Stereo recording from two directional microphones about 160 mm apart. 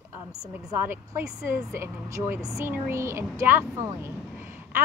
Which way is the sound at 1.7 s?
15° right (ahead or behind).